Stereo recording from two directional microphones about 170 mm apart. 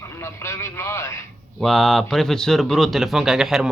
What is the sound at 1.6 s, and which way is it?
Speech, centre (ahead or behind).